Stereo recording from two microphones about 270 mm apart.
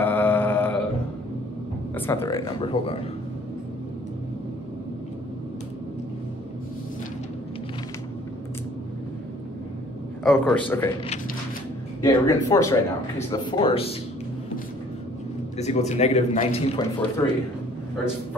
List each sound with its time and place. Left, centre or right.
0.0 s a sound: centre
2.0 s speech: centre
10.2 s a man's voice: centre
12.0 s speech: centre
15.5 s speech: left